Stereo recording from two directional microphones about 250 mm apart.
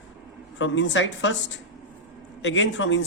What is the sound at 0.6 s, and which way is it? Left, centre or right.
Speech, left.